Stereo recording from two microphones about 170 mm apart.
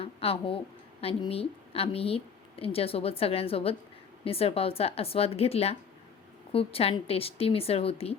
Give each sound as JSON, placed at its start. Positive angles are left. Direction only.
{"t": 0.0, "sound": "a woman's voice", "side_deg": 35}